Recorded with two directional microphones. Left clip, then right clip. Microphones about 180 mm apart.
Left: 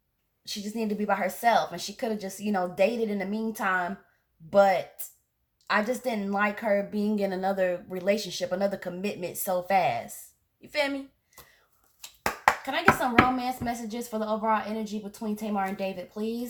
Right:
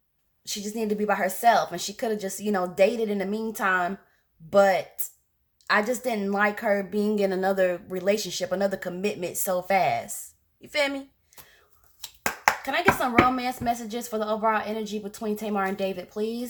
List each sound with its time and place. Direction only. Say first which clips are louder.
0.4 s a woman's voice: right 3 dB; 35° right (ahead or behind)
12.6 s a woman's voice: right 1 dB; 35° right (ahead or behind)